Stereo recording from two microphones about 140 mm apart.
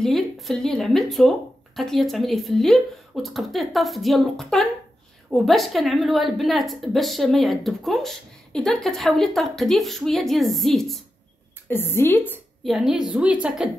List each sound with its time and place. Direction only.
0.0 s a woman's voice: centre (ahead or behind)
11.7 s a woman's voice: 15° left (ahead or behind)
12.6 s a woman's voice: centre (ahead or behind)